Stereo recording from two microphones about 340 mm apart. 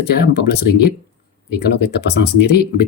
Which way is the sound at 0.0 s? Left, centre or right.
Left.